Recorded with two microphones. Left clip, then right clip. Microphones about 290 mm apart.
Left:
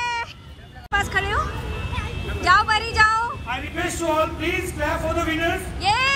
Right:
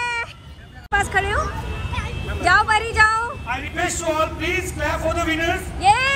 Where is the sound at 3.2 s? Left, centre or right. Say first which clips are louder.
Right 1 dB; centre.